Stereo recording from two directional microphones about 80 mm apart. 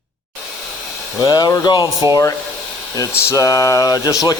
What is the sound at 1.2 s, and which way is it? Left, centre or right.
Speech, left.